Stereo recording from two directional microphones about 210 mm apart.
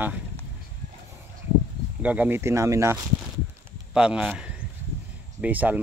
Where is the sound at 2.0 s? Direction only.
5° right (ahead or behind).